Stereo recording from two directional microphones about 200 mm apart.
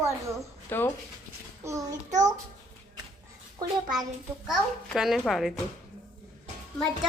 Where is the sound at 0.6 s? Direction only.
10° left (ahead or behind).